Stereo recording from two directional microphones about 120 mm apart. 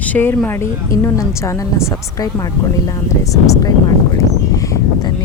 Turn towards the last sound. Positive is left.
turn(degrees=30)  # may be behind; listen again after turning